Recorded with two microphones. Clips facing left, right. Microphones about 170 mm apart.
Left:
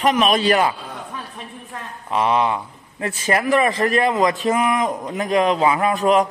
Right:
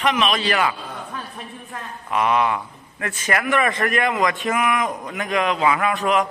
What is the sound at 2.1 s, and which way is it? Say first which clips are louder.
A man's voice: left 1 dB; 30° left (ahead or behind).